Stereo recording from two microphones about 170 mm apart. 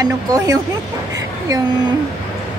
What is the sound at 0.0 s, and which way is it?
Speech, 20° right (ahead or behind).